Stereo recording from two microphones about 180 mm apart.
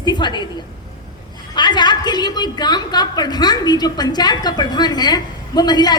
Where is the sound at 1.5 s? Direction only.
25° left (ahead or behind).